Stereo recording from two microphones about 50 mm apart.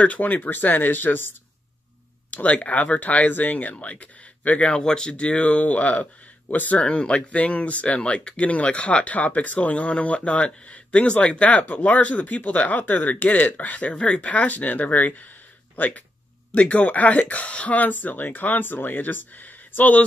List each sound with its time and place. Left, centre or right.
0.0 s speech: left
2.3 s speech: left